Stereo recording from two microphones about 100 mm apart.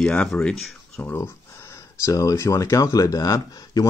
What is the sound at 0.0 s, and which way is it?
Speech, 10° left (ahead or behind).